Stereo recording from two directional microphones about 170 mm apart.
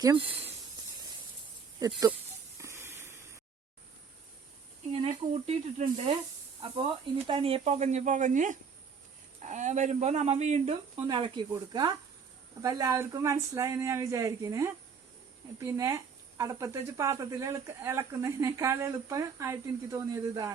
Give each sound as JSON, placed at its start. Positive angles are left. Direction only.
{"t": 0.0, "sound": "speech", "side_deg": -30}
{"t": 2.6, "sound": "a sound", "side_deg": -15}
{"t": 5.3, "sound": "speech", "side_deg": -40}